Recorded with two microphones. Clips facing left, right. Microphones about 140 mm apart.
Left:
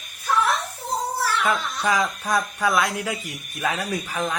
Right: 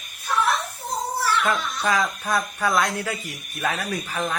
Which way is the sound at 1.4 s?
10° left (ahead or behind).